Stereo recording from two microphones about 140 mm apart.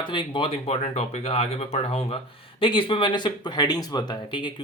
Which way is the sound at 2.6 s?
35° left (ahead or behind).